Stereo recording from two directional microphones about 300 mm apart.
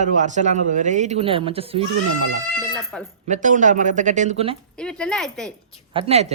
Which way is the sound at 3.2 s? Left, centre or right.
Right.